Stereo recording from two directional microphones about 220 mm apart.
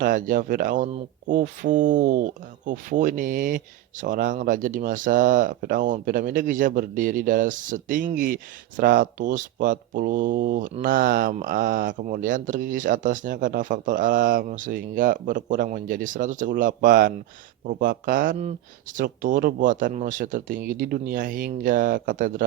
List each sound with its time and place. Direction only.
0.0 s speech: 40° right (ahead or behind)